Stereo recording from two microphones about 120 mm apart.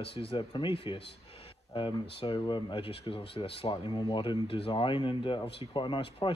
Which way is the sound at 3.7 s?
35° left (ahead or behind).